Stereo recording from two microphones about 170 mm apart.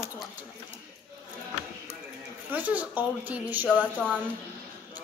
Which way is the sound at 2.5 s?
10° right (ahead or behind).